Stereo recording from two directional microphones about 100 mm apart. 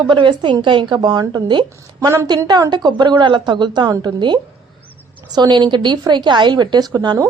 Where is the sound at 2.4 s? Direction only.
40° right (ahead or behind).